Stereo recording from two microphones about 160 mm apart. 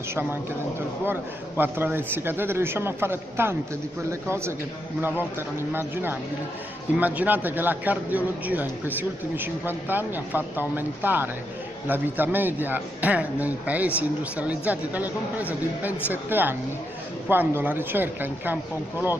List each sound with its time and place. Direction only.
1.6 s a man's voice: 10° right (ahead or behind)